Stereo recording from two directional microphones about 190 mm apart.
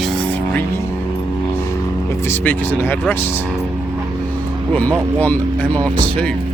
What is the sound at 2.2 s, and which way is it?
Speech, 10° left (ahead or behind).